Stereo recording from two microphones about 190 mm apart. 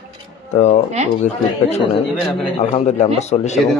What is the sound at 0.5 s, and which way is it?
A man's voice, 35° left (ahead or behind).